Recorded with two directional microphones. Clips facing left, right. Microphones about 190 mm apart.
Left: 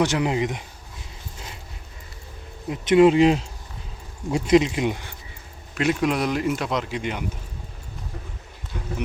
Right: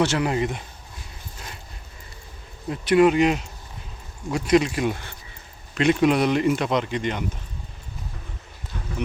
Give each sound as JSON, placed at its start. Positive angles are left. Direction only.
{"t": 0.0, "sound": "speech", "side_deg": 15}
{"t": 2.6, "sound": "speech", "side_deg": 20}
{"t": 5.7, "sound": "speech", "side_deg": 5}